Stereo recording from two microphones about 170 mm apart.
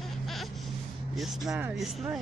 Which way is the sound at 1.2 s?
5° right (ahead or behind).